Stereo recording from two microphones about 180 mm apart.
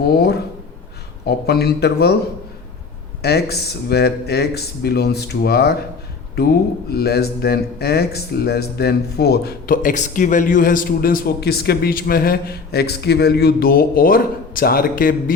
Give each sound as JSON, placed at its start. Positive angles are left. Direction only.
{"t": 1.2, "sound": "speech", "side_deg": 65}
{"t": 3.2, "sound": "speech", "side_deg": 65}